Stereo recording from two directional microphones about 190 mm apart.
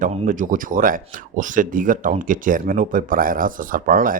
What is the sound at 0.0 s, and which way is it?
Speech, 40° right (ahead or behind).